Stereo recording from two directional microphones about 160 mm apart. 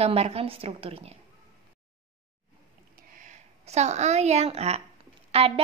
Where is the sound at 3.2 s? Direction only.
45° right (ahead or behind).